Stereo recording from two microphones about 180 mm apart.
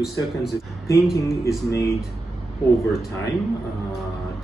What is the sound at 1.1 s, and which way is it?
Speech, 15° left (ahead or behind).